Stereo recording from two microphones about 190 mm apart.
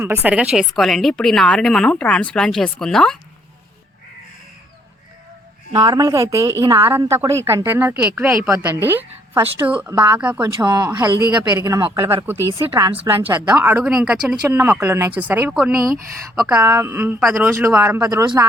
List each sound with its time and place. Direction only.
0.0 s a woman's voice: 10° right (ahead or behind)
5.7 s a woman's voice: 20° right (ahead or behind); by 8.5 s 5° right (ahead or behind)
8.5 s a woman's voice: 15° right (ahead or behind)
10.4 s a woman's voice: 20° right (ahead or behind); by 16.6 s centre (ahead or behind)
16.6 s a woman's voice: 15° right (ahead or behind)